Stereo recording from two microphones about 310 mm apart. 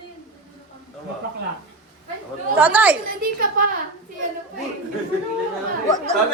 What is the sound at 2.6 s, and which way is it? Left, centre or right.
Speech, centre.